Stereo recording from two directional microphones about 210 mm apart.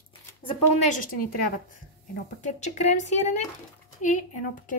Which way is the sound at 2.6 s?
35° left (ahead or behind).